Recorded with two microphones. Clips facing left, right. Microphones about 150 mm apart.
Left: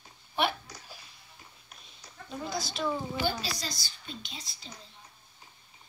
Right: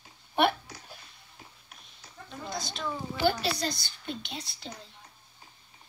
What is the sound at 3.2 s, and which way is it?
A woman's voice, 60° right (ahead or behind).